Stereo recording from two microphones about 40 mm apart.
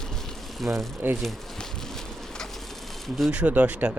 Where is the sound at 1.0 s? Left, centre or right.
Right.